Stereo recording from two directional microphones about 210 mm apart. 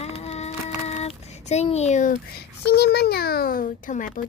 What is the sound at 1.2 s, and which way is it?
Speech, 30° left (ahead or behind).